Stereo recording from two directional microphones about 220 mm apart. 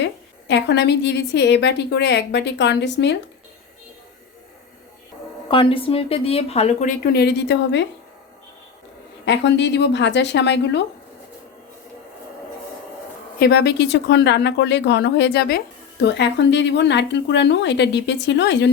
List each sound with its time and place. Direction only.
0.0 s speech: 55° left (ahead or behind)
5.5 s a woman's voice: 25° left (ahead or behind); by 7.9 s 50° left (ahead or behind)
9.2 s speech: 50° left (ahead or behind)
13.4 s speech: 45° left (ahead or behind)